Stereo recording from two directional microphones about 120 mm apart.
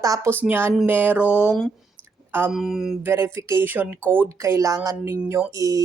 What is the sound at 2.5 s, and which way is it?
Mantra, centre (ahead or behind).